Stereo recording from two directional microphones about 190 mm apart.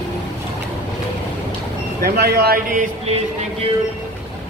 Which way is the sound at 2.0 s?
55° right (ahead or behind).